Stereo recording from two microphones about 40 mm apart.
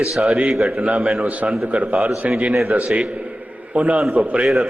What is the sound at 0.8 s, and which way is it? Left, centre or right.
A man's voice, right.